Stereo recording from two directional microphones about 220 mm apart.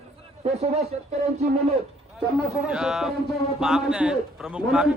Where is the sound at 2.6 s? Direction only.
5° right (ahead or behind).